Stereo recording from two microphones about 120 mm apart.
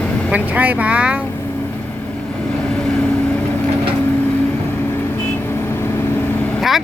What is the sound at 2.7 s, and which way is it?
Vehicle, 10° left (ahead or behind).